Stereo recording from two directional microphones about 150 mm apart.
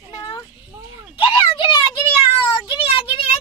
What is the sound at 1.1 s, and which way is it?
Speech, 35° left (ahead or behind).